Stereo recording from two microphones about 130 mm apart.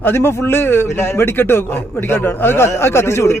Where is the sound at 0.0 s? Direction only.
15° left (ahead or behind).